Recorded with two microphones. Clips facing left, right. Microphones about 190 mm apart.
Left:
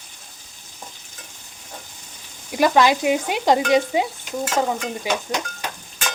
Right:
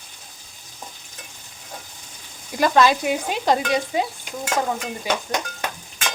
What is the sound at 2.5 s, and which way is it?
Speech, 15° left (ahead or behind).